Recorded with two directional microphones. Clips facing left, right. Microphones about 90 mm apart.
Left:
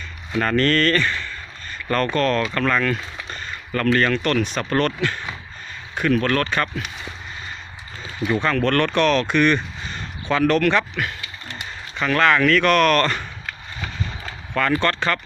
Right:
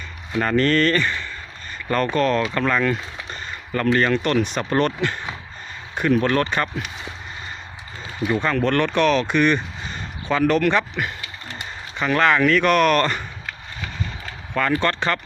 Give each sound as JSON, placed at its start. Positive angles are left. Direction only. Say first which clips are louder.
{"t": 0.3, "sound": "speech", "louder": "even", "side_deg": -15}
{"t": 8.2, "sound": "speech", "louder": "even", "side_deg": -10}
{"t": 14.5, "sound": "speech", "louder": "even", "side_deg": -10}